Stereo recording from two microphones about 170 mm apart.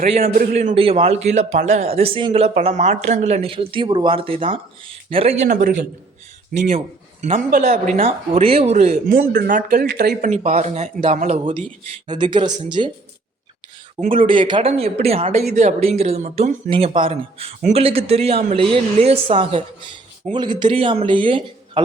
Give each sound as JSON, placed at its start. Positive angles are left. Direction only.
{"t": 0.5, "sound": "a man's voice", "side_deg": -45}
{"t": 0.8, "sound": "speech", "side_deg": -35}
{"t": 5.5, "sound": "speech", "side_deg": -55}
{"t": 6.6, "sound": "speech", "side_deg": -40}
{"t": 9.1, "sound": "speech", "side_deg": -60}
{"t": 10.2, "sound": "a man's voice", "side_deg": -45}
{"t": 12.0, "sound": "speech", "side_deg": -30}
{"t": 14.0, "sound": "speech", "side_deg": -30}